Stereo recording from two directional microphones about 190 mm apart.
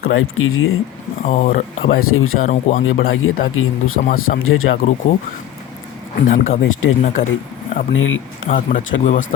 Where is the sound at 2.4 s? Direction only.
40° left (ahead or behind).